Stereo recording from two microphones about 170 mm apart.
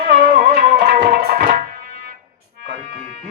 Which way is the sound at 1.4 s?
55° right (ahead or behind).